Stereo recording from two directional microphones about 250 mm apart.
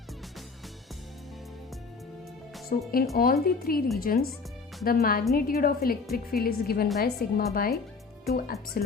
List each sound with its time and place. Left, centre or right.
2.6 s a woman's voice: left